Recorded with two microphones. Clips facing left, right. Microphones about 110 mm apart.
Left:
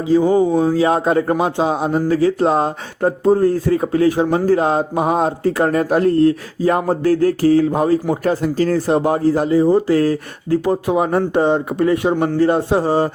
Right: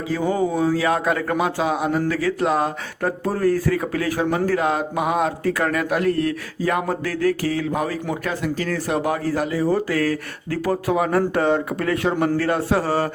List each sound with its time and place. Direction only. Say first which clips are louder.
0.0 s a man's voice: left 8 dB; 25° left (ahead or behind)